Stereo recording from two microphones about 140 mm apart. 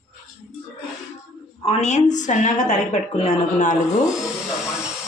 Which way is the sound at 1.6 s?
55° left (ahead or behind).